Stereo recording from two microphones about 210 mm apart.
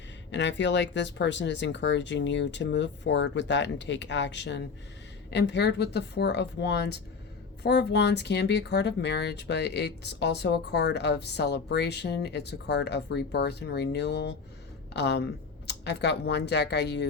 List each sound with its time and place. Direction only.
0.3 s speech: 55° left (ahead or behind)